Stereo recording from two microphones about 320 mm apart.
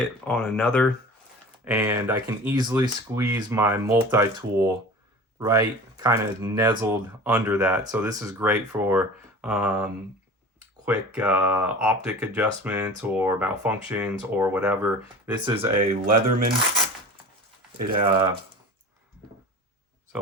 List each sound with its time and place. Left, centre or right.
0.3 s speech: centre
1.6 s speech: centre
15.4 s speech: centre
18.0 s speech: centre